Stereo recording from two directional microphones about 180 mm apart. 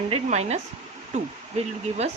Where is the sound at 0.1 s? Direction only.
35° right (ahead or behind).